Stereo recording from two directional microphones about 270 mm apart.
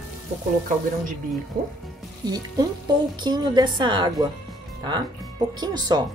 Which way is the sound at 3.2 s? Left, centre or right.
Centre.